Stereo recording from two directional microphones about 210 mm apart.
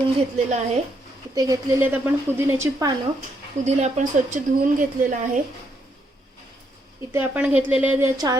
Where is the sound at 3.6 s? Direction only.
35° right (ahead or behind).